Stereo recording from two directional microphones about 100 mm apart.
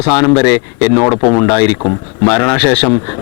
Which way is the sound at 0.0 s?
15° left (ahead or behind).